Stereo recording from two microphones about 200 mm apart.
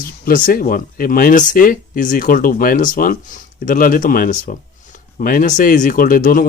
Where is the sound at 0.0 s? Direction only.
45° left (ahead or behind).